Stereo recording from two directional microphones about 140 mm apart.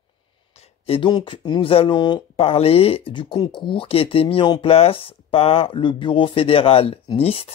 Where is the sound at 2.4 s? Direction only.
45° left (ahead or behind).